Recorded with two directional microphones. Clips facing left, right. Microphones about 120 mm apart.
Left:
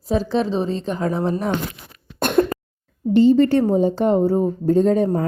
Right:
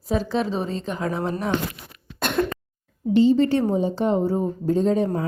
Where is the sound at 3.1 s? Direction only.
50° left (ahead or behind).